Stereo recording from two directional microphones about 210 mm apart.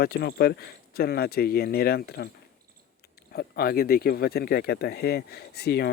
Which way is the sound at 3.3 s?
50° left (ahead or behind).